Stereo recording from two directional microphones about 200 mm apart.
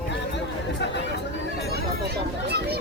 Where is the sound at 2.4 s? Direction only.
50° right (ahead or behind).